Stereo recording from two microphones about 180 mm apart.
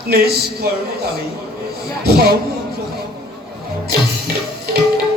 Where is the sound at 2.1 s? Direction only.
60° right (ahead or behind).